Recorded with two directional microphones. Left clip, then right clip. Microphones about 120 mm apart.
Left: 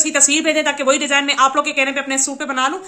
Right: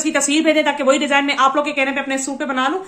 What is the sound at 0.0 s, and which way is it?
A woman's voice, 30° left (ahead or behind).